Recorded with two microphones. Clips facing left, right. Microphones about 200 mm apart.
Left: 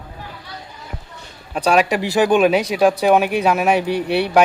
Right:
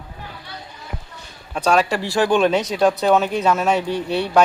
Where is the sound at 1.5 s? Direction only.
10° left (ahead or behind).